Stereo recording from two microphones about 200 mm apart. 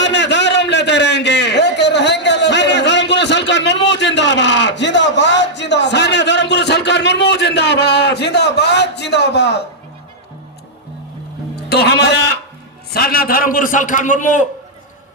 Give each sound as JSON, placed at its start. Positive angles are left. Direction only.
{"t": 0.0, "sound": "a sound", "side_deg": 60}
{"t": 11.5, "sound": "music", "side_deg": 55}
{"t": 12.9, "sound": "a man's voice", "side_deg": 50}